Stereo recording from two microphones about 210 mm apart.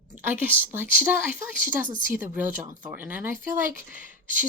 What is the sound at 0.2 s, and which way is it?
A woman's voice, 10° right (ahead or behind).